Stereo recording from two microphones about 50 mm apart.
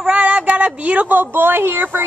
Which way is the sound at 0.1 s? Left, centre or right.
Right.